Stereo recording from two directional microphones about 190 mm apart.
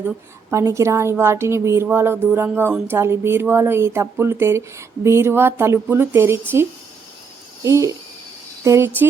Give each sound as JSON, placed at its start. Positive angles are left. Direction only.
{"t": 0.5, "sound": "speech", "side_deg": -15}
{"t": 7.6, "sound": "speech", "side_deg": -15}